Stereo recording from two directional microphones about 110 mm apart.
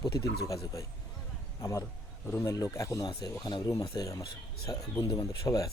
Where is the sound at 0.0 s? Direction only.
35° left (ahead or behind).